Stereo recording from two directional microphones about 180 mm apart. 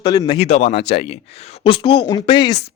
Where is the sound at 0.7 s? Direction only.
70° left (ahead or behind).